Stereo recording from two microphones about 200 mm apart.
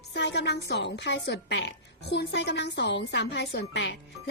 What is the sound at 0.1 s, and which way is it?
A woman's voice, 60° left (ahead or behind).